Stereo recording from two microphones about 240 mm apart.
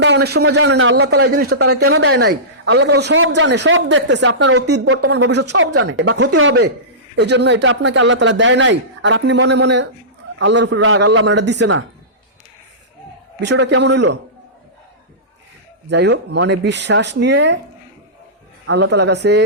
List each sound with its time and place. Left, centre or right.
0.0 s a man's voice: right
13.4 s a man's voice: right
15.9 s a man's voice: right
18.6 s a man's voice: right